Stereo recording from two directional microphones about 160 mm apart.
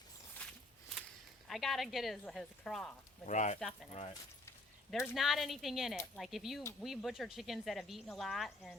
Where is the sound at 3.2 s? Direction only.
45° left (ahead or behind).